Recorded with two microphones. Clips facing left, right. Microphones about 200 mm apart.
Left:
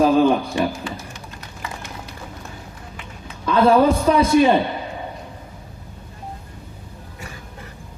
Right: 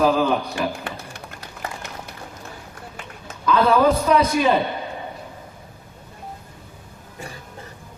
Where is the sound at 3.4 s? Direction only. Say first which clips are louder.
Left 2 dB; 30° left (ahead or behind).